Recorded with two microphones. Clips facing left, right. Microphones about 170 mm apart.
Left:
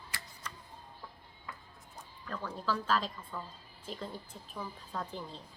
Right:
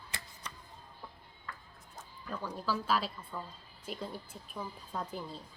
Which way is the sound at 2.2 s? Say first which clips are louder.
Even; 10° right (ahead or behind).